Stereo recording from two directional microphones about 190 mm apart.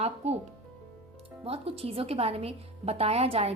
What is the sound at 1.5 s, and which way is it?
A woman's voice, 30° right (ahead or behind).